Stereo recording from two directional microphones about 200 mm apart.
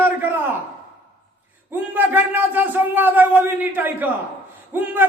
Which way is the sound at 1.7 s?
10° right (ahead or behind).